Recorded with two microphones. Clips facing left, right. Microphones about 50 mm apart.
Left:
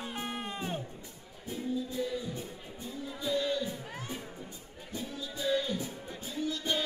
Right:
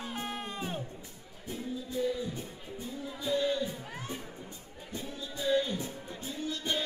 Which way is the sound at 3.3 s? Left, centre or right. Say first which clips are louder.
Right 1 dB; centre.